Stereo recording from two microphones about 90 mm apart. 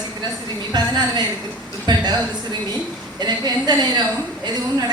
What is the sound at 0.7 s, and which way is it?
A woman's voice, 50° right (ahead or behind).